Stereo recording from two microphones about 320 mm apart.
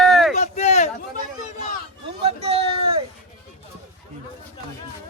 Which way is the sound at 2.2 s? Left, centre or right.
Centre.